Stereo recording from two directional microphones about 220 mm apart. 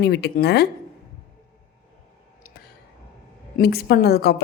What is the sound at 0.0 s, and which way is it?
Speech, 50° left (ahead or behind).